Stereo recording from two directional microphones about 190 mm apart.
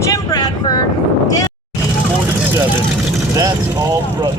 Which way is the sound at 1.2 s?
20° left (ahead or behind).